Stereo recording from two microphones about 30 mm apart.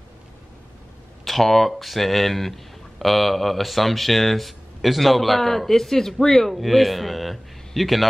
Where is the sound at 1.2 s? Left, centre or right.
Centre.